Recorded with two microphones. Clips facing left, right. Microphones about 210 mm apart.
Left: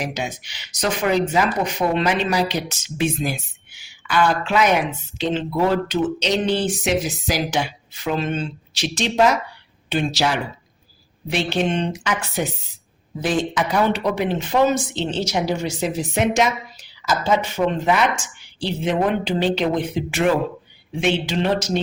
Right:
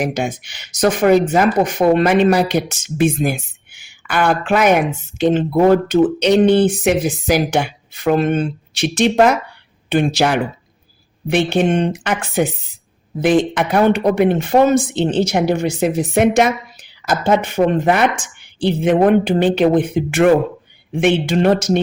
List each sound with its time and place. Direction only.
0.0 s speech: 50° right (ahead or behind)